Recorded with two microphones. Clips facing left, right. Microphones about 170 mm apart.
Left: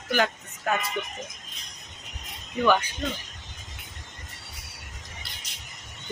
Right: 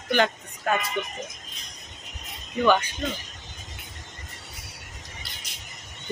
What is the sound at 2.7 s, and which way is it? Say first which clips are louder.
Speech: right 1 dB; 10° left (ahead or behind).